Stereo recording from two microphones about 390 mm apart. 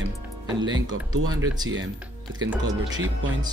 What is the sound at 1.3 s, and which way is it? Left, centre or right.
Speech, centre.